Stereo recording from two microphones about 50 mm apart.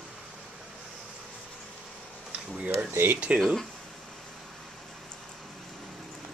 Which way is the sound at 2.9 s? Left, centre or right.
Right.